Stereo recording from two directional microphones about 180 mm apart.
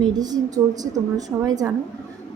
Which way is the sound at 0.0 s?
20° right (ahead or behind).